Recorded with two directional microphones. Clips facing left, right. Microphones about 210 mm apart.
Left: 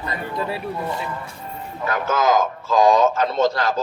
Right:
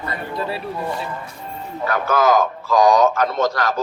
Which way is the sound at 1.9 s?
20° left (ahead or behind).